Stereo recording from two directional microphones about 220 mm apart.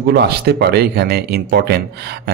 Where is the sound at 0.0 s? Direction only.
45° right (ahead or behind).